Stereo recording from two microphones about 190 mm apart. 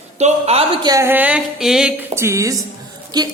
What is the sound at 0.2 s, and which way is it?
A man's voice, 35° right (ahead or behind).